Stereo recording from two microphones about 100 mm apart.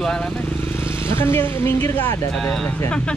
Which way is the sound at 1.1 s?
25° left (ahead or behind).